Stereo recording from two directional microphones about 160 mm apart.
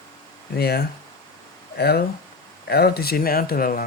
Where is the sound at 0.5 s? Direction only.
85° left.